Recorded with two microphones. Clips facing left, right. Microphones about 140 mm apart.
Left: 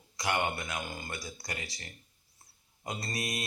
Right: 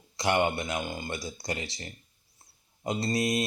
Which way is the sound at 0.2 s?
25° right (ahead or behind).